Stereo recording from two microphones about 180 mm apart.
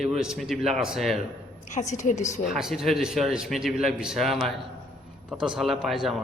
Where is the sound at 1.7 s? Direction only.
40° left (ahead or behind).